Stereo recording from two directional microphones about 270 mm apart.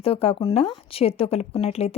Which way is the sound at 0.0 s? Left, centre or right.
Left.